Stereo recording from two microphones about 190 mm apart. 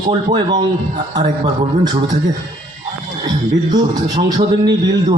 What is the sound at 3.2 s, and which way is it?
A man's voice, 20° right (ahead or behind).